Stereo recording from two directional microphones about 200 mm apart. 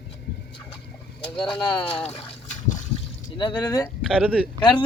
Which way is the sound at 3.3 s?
25° left (ahead or behind).